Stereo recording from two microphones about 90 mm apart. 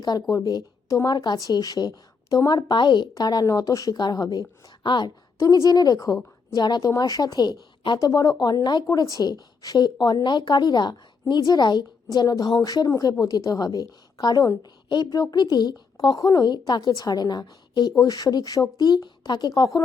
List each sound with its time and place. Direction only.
0.0 s a woman's voice: 45° left (ahead or behind)
5.4 s a woman's voice: 40° left (ahead or behind); by 19.5 s 55° left (ahead or behind)
19.5 s speech: 40° left (ahead or behind)